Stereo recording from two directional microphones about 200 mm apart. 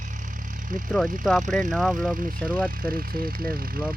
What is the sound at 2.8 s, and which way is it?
Speech, 45° right (ahead or behind).